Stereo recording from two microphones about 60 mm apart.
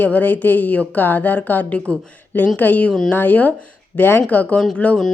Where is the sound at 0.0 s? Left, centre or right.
Left.